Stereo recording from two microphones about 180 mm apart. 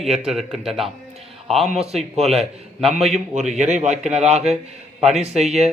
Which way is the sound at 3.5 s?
40° right (ahead or behind).